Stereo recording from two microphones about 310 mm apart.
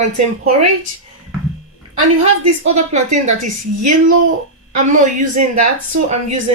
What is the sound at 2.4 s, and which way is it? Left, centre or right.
A woman's voice, right.